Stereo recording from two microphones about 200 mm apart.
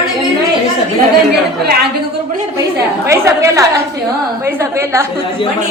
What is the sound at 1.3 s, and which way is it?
Speech, 55° right (ahead or behind).